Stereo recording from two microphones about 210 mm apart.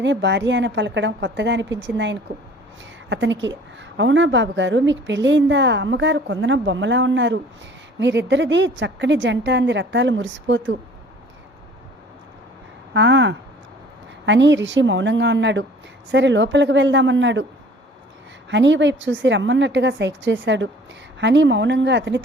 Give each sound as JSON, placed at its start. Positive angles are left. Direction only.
{"t": 0.0, "sound": "a woman's voice", "side_deg": -60}
{"t": 12.9, "sound": "a woman's voice", "side_deg": -60}
{"t": 18.5, "sound": "a woman's voice", "side_deg": -60}